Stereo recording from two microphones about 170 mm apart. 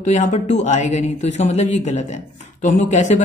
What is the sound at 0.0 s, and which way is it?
A man's voice, 45° left (ahead or behind).